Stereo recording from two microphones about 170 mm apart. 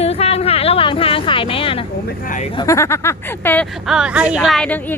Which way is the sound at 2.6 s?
15° left (ahead or behind).